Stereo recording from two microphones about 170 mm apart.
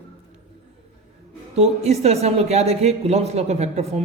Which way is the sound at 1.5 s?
40° right (ahead or behind).